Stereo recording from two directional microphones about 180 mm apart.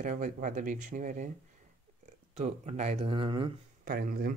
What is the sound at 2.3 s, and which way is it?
A man's voice, 40° right (ahead or behind).